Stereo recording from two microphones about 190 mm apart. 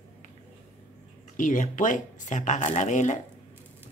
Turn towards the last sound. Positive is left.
turn(degrees=40)  # may be behind; listen again after turning